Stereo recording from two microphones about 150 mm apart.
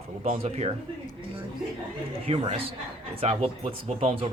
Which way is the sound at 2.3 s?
40° right (ahead or behind).